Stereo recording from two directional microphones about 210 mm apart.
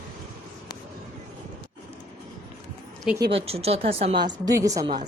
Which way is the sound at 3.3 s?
30° right (ahead or behind).